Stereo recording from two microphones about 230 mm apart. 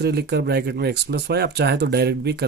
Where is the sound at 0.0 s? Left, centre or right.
Right.